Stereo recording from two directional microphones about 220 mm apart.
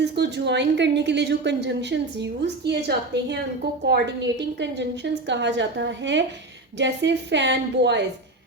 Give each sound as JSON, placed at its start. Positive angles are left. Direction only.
{"t": 0.0, "sound": "a woman's voice", "side_deg": -50}